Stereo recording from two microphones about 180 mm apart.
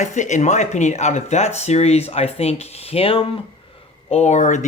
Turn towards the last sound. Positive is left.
turn(degrees=40)  # may be behind; listen again after turning